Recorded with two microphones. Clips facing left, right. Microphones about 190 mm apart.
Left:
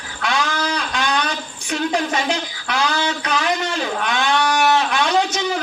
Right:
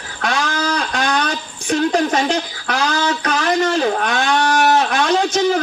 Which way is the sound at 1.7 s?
45° right (ahead or behind).